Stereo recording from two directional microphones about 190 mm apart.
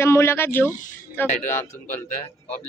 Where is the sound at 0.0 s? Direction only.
15° left (ahead or behind).